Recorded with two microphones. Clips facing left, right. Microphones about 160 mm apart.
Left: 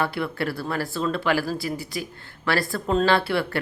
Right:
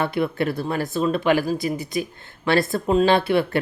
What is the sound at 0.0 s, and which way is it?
Speech, 20° right (ahead or behind).